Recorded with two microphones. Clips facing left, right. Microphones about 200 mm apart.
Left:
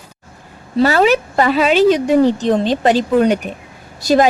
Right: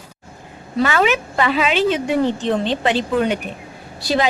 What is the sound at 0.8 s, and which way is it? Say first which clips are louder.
A woman's voice: left 5 dB; 35° left (ahead or behind).